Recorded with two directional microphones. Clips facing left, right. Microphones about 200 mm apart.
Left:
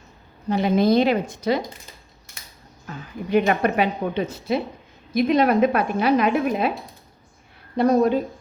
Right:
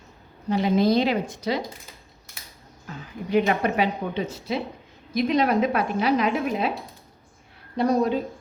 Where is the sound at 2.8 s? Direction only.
55° left (ahead or behind).